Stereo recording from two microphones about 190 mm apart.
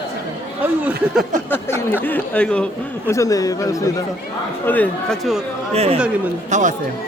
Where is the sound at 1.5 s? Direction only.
10° left (ahead or behind).